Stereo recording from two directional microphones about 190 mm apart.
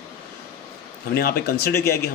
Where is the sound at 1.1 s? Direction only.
55° left (ahead or behind).